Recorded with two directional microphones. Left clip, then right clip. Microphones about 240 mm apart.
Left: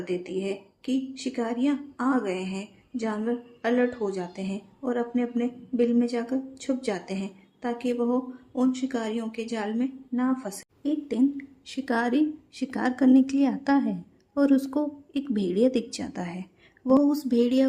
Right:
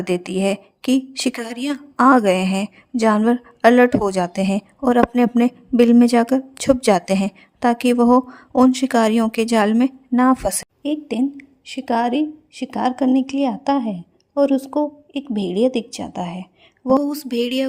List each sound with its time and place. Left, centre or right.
0.0 s speech: right
10.8 s a woman's voice: right
17.0 s a sound: right